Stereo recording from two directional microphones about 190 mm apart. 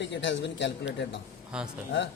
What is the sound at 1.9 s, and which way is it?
Speech, 75° left (ahead or behind).